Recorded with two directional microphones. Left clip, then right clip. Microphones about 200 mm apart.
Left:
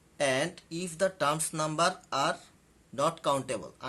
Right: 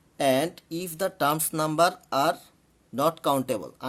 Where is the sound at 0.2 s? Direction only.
50° right (ahead or behind).